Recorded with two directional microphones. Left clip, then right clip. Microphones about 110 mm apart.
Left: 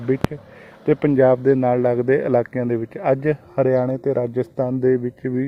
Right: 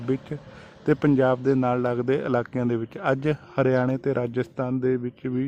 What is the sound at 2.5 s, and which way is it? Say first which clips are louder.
Speech: left 4 dB; 20° right (ahead or behind).